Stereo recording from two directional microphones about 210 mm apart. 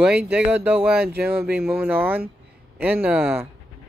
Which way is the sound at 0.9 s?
50° right (ahead or behind).